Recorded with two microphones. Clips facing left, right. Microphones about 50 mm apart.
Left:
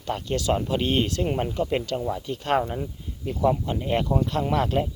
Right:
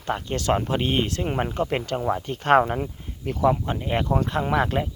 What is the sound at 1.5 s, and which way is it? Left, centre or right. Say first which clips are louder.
Speech: even; right.